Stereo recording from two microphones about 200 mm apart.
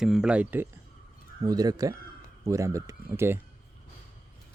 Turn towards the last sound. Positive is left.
turn(degrees=-10)  # may be behind; listen again after turning